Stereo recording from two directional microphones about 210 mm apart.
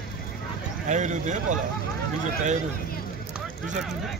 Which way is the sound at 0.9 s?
35° right (ahead or behind).